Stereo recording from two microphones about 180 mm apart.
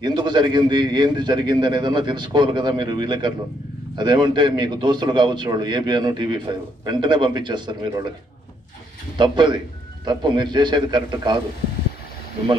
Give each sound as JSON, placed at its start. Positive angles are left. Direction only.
{"t": 0.0, "sound": "a man's voice", "side_deg": -25}
{"t": 9.2, "sound": "a man's voice", "side_deg": -25}